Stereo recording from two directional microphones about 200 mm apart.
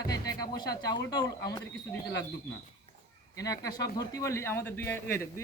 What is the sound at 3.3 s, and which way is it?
A man's voice, 15° left (ahead or behind).